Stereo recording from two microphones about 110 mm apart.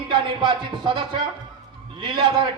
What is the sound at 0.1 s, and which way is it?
A man's voice, 45° right (ahead or behind).